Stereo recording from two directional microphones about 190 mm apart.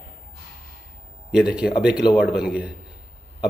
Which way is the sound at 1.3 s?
5° right (ahead or behind).